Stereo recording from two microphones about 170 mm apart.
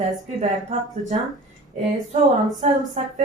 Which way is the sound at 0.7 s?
45° right (ahead or behind).